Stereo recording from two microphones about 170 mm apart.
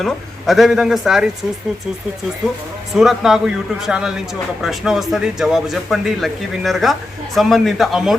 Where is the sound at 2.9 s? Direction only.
Centre (ahead or behind).